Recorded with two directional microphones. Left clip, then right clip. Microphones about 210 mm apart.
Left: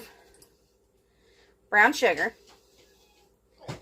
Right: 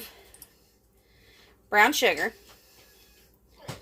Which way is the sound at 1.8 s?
15° right (ahead or behind).